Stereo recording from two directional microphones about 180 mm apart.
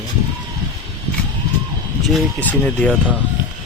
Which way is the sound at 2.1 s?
5° left (ahead or behind).